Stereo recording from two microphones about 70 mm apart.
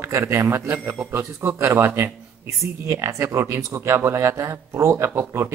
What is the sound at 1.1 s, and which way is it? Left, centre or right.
Speech, right.